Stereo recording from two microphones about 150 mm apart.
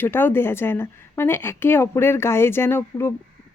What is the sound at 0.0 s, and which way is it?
A woman's voice, 15° left (ahead or behind).